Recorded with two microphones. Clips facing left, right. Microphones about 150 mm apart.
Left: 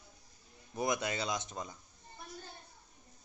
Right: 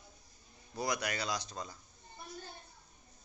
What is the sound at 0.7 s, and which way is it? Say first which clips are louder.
A man's voice: left 2 dB; 20° left (ahead or behind).